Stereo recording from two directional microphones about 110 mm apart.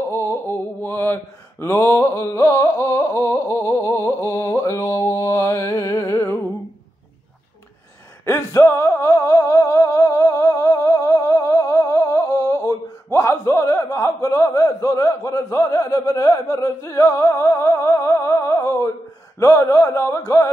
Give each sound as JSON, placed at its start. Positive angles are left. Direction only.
{"t": 0.1, "sound": "mantra", "side_deg": 25}
{"t": 8.3, "sound": "music", "side_deg": 25}
{"t": 19.4, "sound": "mantra", "side_deg": 30}